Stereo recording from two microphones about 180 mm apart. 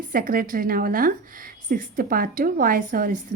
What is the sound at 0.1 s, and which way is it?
A woman's voice, 50° right (ahead or behind).